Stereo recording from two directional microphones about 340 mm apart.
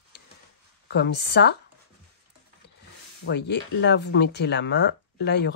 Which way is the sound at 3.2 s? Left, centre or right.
Left.